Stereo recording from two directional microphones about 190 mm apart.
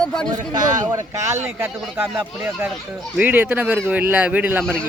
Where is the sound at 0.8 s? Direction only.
20° right (ahead or behind).